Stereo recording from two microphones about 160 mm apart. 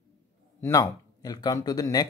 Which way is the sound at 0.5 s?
20° left (ahead or behind).